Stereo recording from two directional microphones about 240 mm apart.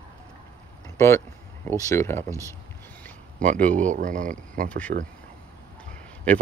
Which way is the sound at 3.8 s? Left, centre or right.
Right.